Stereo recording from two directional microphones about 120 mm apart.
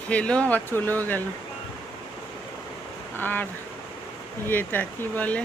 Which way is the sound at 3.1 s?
15° left (ahead or behind).